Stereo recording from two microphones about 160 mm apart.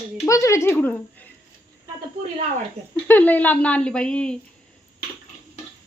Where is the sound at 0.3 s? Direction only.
20° left (ahead or behind).